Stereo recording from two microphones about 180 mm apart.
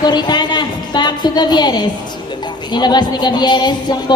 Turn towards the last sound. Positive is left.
turn(degrees=25)  # may be behind; listen again after turning